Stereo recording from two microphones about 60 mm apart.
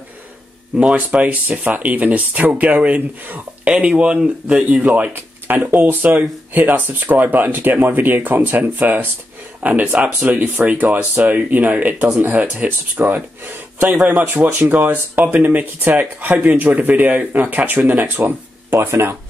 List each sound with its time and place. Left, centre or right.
0.7 s speech: right
5.1 s speech: right